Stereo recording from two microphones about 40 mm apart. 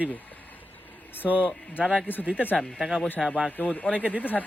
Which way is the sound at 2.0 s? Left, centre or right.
Left.